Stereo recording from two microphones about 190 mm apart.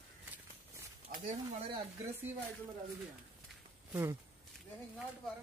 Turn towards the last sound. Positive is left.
turn(degrees=-15)  # may be behind; listen again after turning